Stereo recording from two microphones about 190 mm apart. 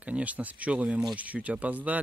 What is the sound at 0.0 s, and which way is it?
Speech, 5° right (ahead or behind).